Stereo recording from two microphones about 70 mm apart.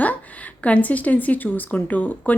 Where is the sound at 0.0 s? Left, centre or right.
Left.